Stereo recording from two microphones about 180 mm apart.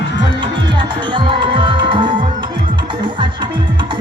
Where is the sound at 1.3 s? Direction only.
30° right (ahead or behind).